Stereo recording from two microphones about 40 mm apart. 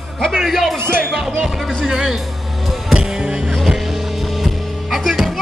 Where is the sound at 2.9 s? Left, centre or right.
Centre.